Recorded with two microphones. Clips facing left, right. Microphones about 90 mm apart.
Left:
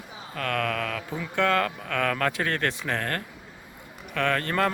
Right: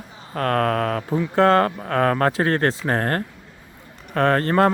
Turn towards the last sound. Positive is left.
turn(degrees=-35)  # may be behind; listen again after turning